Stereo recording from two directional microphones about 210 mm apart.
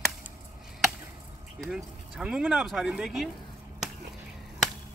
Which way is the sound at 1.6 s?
5° right (ahead or behind).